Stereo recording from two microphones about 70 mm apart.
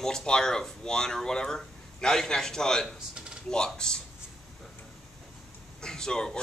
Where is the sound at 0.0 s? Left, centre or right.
Centre.